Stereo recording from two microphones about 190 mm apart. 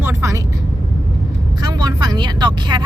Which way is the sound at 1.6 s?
20° right (ahead or behind).